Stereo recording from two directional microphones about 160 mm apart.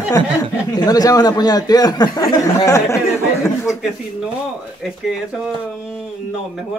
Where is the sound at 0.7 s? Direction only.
25° left (ahead or behind).